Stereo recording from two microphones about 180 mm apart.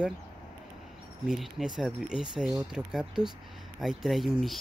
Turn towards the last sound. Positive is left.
turn(degrees=0)  # may be behind; listen again after turning